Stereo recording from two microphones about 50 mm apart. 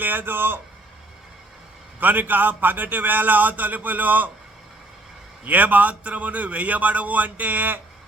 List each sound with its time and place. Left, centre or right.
0.0 s speech: right
2.0 s a man's voice: right
5.5 s a man's voice: right